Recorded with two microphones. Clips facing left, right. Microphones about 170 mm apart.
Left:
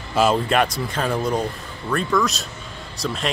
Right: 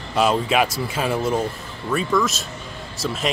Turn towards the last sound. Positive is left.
turn(degrees=0)  # may be behind; listen again after turning